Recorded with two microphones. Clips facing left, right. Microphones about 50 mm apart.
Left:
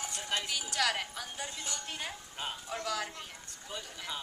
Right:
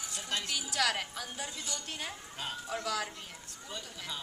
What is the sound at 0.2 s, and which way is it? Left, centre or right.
Speech, centre.